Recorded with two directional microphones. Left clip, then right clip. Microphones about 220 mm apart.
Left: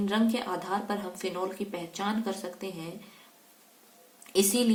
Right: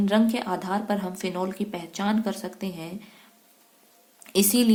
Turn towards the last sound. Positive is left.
turn(degrees=-50)  # may be behind; listen again after turning